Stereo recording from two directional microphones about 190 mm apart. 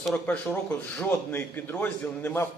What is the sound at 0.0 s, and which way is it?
Speech, 5° left (ahead or behind).